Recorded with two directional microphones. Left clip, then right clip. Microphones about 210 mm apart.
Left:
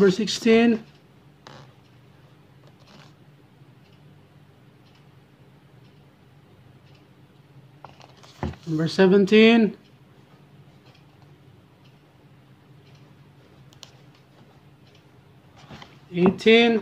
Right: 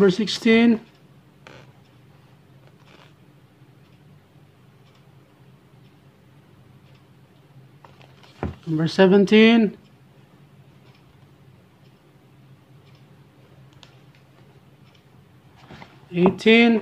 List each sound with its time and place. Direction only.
0.0 s speech: 10° right (ahead or behind)
8.7 s speech: 15° right (ahead or behind)
16.1 s speech: 20° right (ahead or behind)